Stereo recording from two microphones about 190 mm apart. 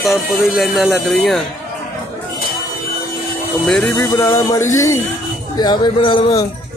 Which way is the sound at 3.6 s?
5° left (ahead or behind).